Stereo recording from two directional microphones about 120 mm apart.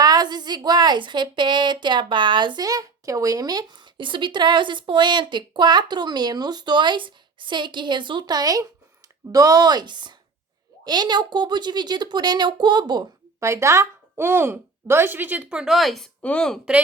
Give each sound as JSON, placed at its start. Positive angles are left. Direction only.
{"t": 0.0, "sound": "a woman's voice", "side_deg": -35}
{"t": 13.4, "sound": "a woman's voice", "side_deg": -25}